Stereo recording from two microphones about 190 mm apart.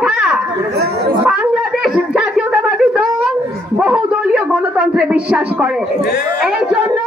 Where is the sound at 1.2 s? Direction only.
5° right (ahead or behind).